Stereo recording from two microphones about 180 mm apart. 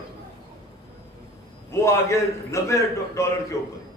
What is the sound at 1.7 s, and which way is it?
A man's voice, 15° left (ahead or behind).